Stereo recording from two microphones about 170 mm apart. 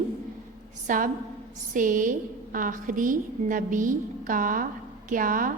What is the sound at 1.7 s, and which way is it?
A woman's voice, 50° right (ahead or behind).